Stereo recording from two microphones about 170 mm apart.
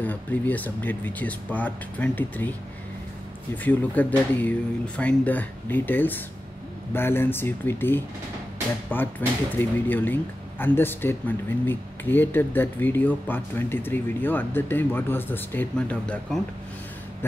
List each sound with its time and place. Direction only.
0.0 s speech: 10° left (ahead or behind)
3.6 s speech: 10° left (ahead or behind)